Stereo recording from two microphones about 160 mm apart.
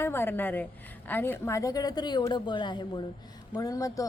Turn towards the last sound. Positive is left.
turn(degrees=20)  # may be behind; listen again after turning